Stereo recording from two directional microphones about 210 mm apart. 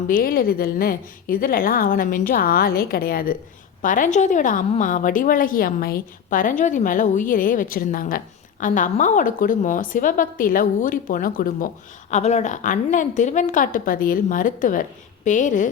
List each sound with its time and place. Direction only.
0.1 s a woman's voice: 45° left (ahead or behind)